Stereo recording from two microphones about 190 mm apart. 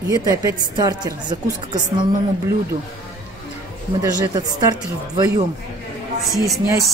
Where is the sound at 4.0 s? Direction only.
20° right (ahead or behind).